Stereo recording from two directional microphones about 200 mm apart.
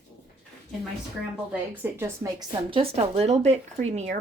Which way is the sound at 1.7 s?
10° right (ahead or behind).